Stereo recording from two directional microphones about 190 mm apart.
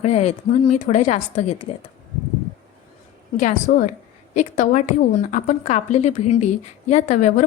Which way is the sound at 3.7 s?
55° left (ahead or behind).